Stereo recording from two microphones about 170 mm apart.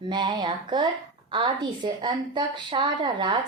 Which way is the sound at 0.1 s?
25° right (ahead or behind).